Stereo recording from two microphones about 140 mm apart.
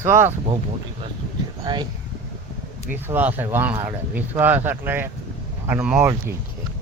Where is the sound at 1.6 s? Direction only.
30° right (ahead or behind).